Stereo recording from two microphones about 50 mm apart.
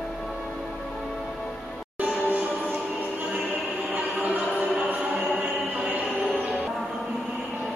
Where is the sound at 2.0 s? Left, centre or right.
Right.